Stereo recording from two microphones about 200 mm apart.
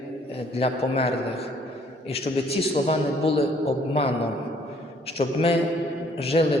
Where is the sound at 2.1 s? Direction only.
30° left (ahead or behind).